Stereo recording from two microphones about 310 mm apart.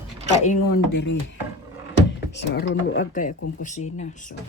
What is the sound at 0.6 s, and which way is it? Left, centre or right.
Speech, left.